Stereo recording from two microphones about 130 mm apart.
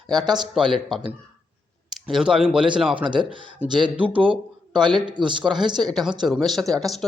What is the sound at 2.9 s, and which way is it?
A man's voice, 40° right (ahead or behind).